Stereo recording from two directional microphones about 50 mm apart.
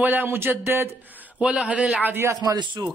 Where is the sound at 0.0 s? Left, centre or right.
Right.